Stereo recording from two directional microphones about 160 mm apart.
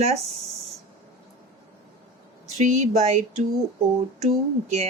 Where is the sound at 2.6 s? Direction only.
45° right (ahead or behind).